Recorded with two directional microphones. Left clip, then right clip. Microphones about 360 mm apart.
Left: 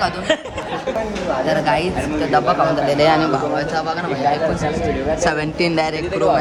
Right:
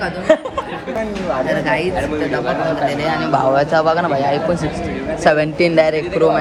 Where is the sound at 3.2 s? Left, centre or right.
Centre.